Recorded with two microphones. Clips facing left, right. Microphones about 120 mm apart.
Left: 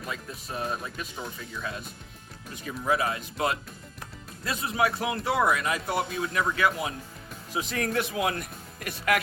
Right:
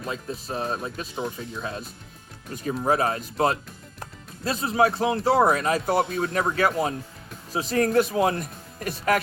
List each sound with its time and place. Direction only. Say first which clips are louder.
0.0 s speech: right 5 dB; 30° right (ahead or behind)